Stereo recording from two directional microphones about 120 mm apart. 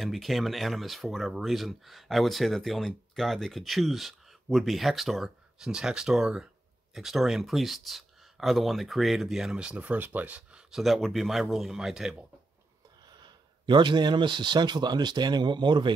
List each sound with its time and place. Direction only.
0.0 s speech: centre (ahead or behind)
13.0 s speech: 40° right (ahead or behind)